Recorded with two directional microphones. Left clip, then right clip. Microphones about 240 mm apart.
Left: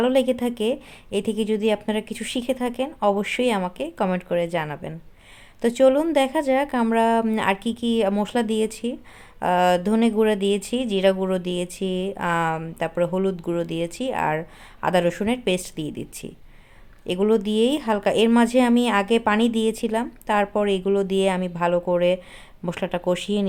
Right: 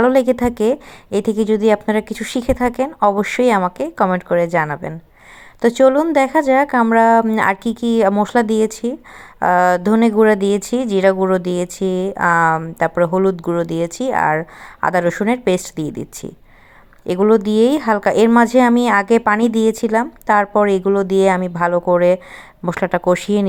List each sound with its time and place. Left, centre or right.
0.0 s speech: centre
17.1 s speech: centre